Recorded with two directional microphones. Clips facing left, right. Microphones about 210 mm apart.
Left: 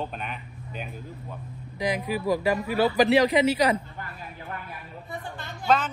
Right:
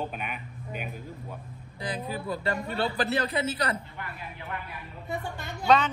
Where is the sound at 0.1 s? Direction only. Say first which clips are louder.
Left 1 dB; 10° right (ahead or behind).